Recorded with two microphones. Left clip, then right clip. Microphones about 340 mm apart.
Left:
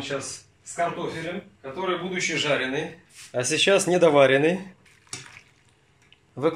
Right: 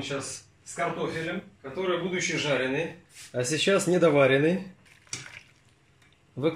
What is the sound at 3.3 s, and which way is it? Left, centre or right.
Speech, left.